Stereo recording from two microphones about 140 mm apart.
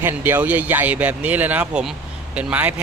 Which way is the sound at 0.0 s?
15° right (ahead or behind).